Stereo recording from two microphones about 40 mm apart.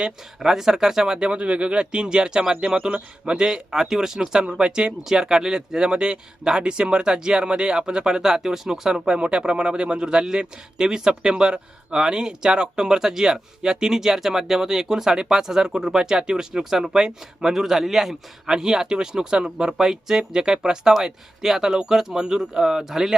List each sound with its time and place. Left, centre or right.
0.3 s speech: centre
3.4 s speech: centre
9.0 s speech: right; by 23.1 s centre